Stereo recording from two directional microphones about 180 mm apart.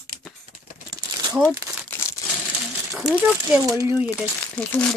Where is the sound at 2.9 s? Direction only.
5° right (ahead or behind).